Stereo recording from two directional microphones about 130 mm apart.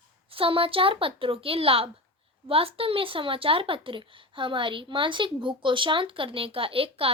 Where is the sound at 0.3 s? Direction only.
45° right (ahead or behind).